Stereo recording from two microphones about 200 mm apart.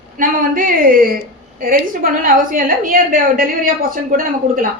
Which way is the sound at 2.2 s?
45° right (ahead or behind).